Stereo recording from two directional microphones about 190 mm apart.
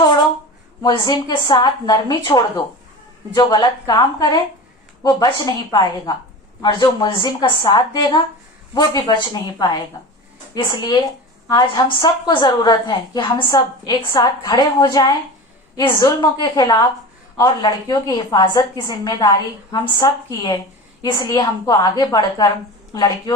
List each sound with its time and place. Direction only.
0.8 s a woman's voice: 20° left (ahead or behind)